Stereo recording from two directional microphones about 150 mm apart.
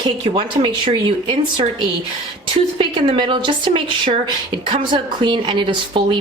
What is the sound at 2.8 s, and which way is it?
A woman's voice, 35° right (ahead or behind).